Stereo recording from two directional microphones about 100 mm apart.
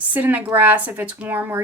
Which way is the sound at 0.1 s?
20° right (ahead or behind).